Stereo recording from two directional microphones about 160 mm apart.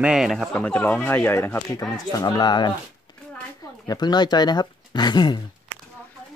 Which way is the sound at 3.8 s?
25° left (ahead or behind).